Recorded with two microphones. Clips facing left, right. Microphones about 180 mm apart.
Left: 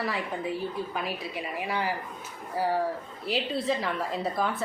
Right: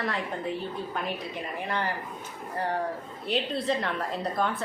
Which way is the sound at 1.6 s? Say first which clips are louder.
Left 1 dB; 5° left (ahead or behind).